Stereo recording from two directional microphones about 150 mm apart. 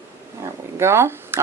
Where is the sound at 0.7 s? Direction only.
15° right (ahead or behind).